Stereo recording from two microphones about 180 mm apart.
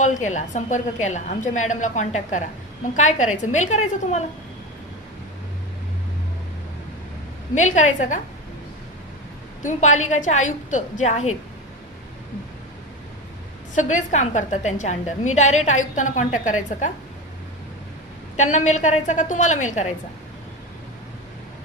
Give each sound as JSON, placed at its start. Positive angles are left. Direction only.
{"t": 0.0, "sound": "a woman's voice", "side_deg": 40}
{"t": 7.5, "sound": "a woman's voice", "side_deg": 40}
{"t": 9.6, "sound": "a woman's voice", "side_deg": 40}
{"t": 13.7, "sound": "a woman's voice", "side_deg": 40}
{"t": 18.3, "sound": "a woman's voice", "side_deg": 40}